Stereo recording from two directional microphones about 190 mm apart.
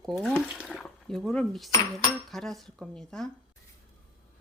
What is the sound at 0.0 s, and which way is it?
Speech, centre (ahead or behind).